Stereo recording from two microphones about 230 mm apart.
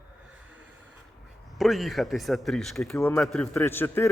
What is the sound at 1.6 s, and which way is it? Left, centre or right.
A man's voice, centre.